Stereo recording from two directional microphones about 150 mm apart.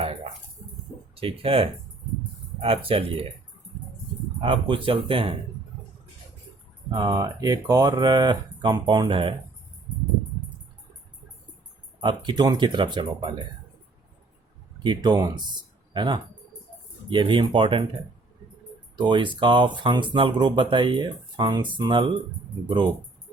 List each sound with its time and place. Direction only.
1.1 s speech: 40° right (ahead or behind)
4.4 s speech: 35° right (ahead or behind)
6.9 s speech: 25° right (ahead or behind)
11.9 s speech: 30° right (ahead or behind)
14.8 s speech: 30° right (ahead or behind)
18.9 s speech: 30° right (ahead or behind)